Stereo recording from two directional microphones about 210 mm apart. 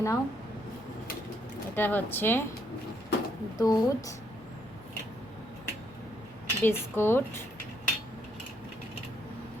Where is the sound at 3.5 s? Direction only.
15° left (ahead or behind).